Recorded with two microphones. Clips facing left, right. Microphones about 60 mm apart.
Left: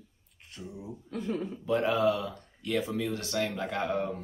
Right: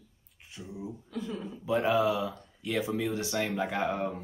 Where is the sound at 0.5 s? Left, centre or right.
Centre.